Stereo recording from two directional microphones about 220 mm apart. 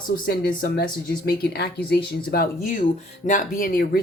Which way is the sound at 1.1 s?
40° left (ahead or behind).